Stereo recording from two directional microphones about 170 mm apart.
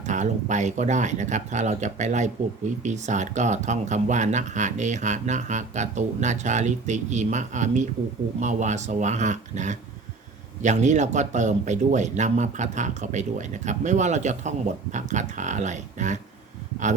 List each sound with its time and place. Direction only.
0.0 s speech: 45° right (ahead or behind)